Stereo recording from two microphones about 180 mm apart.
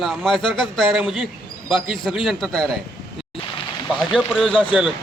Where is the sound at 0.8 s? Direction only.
Centre (ahead or behind).